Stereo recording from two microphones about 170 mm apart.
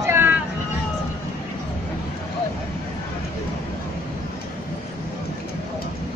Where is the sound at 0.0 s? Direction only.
15° right (ahead or behind).